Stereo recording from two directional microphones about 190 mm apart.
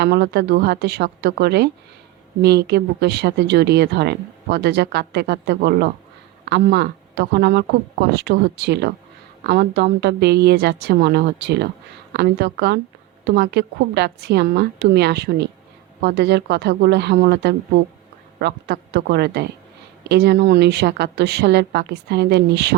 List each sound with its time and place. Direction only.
0.0 s speech: 60° right (ahead or behind)